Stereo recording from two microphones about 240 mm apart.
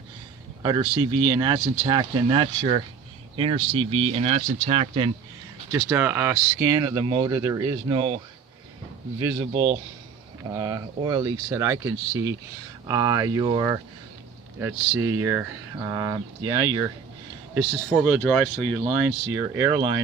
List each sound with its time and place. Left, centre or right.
0.6 s speech: centre
5.7 s speech: centre
10.5 s speech: centre
17.5 s speech: centre
18.9 s speech: centre